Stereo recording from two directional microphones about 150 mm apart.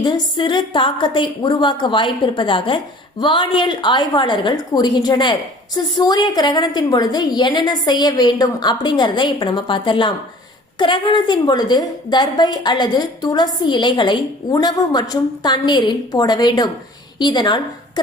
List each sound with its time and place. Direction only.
0.0 s a woman's voice: 30° left (ahead or behind)